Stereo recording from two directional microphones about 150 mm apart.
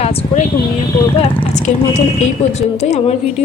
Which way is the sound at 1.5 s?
50° left (ahead or behind).